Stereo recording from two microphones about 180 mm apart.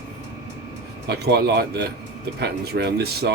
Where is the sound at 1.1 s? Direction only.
65° right (ahead or behind).